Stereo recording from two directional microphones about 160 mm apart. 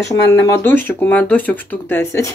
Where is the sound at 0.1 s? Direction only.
20° left (ahead or behind).